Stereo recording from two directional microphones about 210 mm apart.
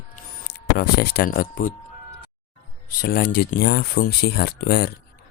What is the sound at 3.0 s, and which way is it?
Speech, 45° left (ahead or behind).